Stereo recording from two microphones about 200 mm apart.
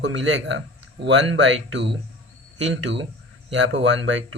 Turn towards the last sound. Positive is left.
turn(degrees=-65)  # may be behind; listen again after turning